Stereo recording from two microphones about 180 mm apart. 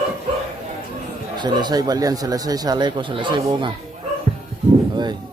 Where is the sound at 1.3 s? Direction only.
25° right (ahead or behind).